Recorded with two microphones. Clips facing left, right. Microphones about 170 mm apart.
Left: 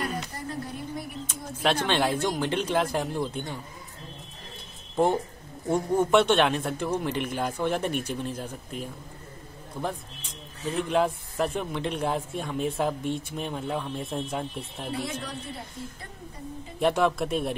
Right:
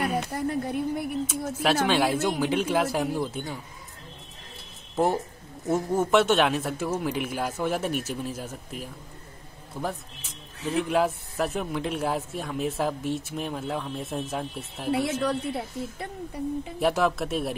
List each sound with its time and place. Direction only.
0.2 s speech: 60° right (ahead or behind)
1.2 s speech: 5° right (ahead or behind)
4.9 s a man's voice: 5° right (ahead or behind)
14.9 s a woman's voice: 65° right (ahead or behind)
16.8 s a man's voice: centre (ahead or behind)